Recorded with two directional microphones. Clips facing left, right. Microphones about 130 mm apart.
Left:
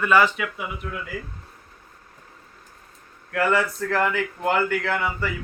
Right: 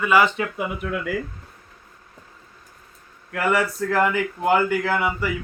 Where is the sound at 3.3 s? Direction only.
15° right (ahead or behind).